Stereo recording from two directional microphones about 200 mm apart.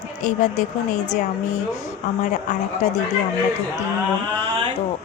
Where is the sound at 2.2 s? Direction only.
35° left (ahead or behind).